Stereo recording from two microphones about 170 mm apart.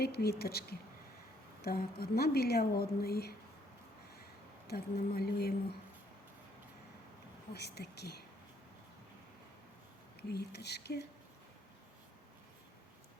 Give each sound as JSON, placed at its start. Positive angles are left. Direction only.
{"t": 0.0, "sound": "a woman's voice", "side_deg": 70}
{"t": 4.6, "sound": "a woman's voice", "side_deg": 70}
{"t": 7.5, "sound": "a woman's voice", "side_deg": 75}
{"t": 10.2, "sound": "a woman's voice", "side_deg": 75}